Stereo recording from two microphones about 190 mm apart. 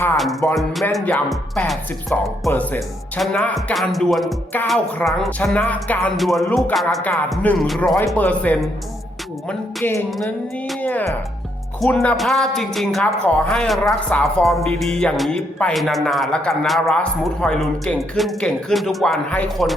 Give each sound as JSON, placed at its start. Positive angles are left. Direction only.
{"t": 0.5, "sound": "speech", "side_deg": 0}
{"t": 2.5, "sound": "speech", "side_deg": 10}
{"t": 10.1, "sound": "music", "side_deg": 0}
{"t": 11.8, "sound": "speech", "side_deg": 5}